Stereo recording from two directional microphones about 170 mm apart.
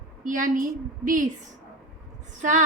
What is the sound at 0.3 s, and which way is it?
A woman's voice, 50° right (ahead or behind).